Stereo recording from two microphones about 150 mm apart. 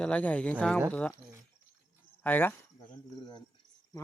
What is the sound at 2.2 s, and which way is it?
Speech, 15° left (ahead or behind).